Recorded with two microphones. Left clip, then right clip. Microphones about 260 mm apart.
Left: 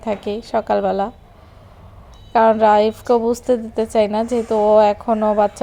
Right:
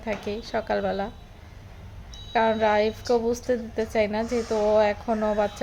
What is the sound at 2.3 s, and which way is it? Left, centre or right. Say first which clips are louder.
A woman's voice: left 9 dB; left.